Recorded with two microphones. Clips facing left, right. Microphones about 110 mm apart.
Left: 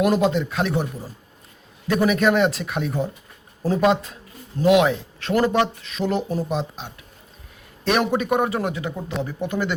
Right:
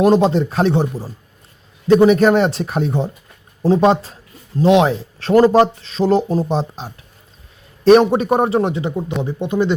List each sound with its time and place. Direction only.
0.0 s speech: 30° right (ahead or behind)